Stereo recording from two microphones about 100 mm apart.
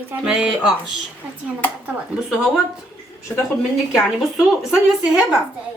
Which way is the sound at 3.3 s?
10° left (ahead or behind).